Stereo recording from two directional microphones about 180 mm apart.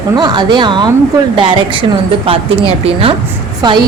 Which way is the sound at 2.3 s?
30° right (ahead or behind).